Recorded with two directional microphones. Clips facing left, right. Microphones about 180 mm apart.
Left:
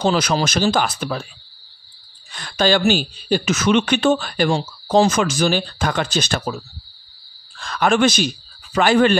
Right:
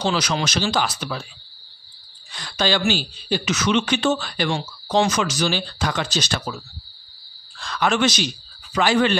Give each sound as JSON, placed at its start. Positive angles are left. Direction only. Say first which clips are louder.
{"t": 0.0, "sound": "speech", "louder": "left 4 dB", "side_deg": 50}
{"t": 2.3, "sound": "speech", "louder": "left 5 dB", "side_deg": 50}
{"t": 7.6, "sound": "speech", "louder": "left 4 dB", "side_deg": 50}